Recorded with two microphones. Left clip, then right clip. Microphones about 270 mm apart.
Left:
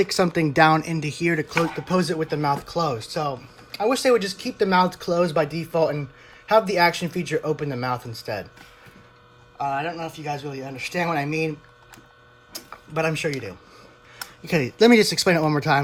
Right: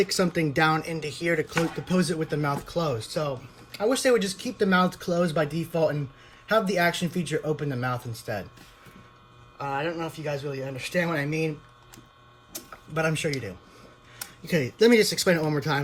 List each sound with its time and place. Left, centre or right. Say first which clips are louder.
0.0 s speech: left 4 dB; left
10.2 s speech: left 1 dB; left
12.9 s speech: left 3 dB; left